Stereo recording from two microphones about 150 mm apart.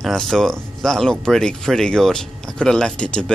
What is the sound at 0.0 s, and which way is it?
Speech, centre (ahead or behind).